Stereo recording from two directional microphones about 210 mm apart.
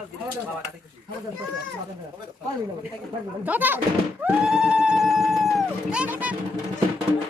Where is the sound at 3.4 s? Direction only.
10° right (ahead or behind).